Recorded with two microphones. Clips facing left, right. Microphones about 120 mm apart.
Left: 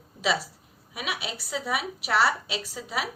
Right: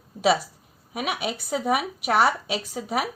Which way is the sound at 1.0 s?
45° right (ahead or behind).